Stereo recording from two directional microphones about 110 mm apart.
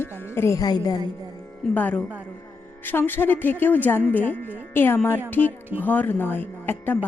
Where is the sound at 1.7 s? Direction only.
15° left (ahead or behind).